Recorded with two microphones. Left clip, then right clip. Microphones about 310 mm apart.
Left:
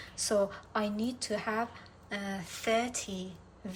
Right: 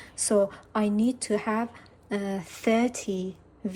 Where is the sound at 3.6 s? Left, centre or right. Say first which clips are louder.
Right 9 dB; centre.